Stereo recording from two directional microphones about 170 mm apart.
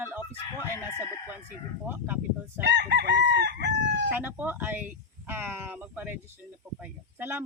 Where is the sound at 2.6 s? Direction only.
85° right.